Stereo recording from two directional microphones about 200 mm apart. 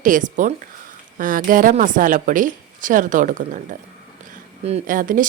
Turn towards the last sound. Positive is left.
turn(degrees=-40)  # may be behind; listen again after turning